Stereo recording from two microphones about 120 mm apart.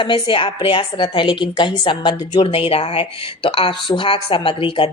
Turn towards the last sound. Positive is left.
turn(degrees=45)  # may be behind; listen again after turning